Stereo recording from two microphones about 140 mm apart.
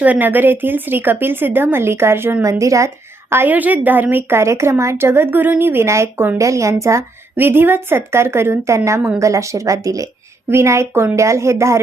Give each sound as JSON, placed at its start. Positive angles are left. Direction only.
{"t": 0.0, "sound": "a woman's voice", "side_deg": -10}